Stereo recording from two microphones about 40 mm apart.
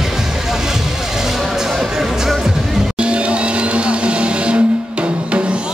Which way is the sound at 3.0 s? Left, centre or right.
Right.